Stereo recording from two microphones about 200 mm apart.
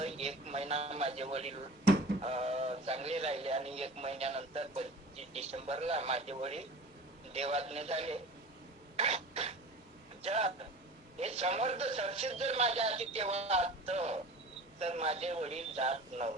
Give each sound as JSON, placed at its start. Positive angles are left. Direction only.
{"t": 0.0, "sound": "a sound", "side_deg": -30}
{"t": 2.2, "sound": "speech", "side_deg": -30}
{"t": 9.0, "sound": "cough", "side_deg": -30}
{"t": 10.2, "sound": "speech", "side_deg": -30}